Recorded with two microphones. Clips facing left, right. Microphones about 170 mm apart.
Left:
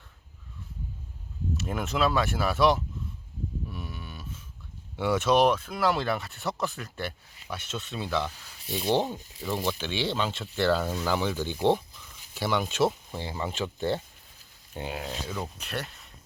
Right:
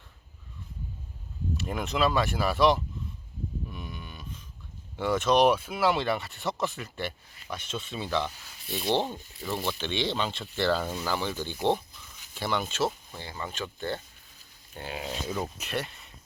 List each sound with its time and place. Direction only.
1.5 s speech: centre (ahead or behind)
3.7 s cattle: centre (ahead or behind)
4.9 s speech: 10° left (ahead or behind)
5.5 s speech: 10° right (ahead or behind)
9.5 s speech: 15° left (ahead or behind)
14.9 s speech: 5° right (ahead or behind)